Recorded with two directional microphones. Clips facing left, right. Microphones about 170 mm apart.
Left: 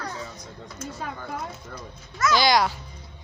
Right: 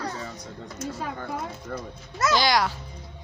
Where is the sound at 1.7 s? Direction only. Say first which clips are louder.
Right 6 dB; 65° right (ahead or behind).